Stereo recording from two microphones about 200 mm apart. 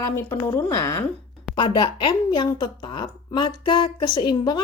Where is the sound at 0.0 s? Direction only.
15° left (ahead or behind).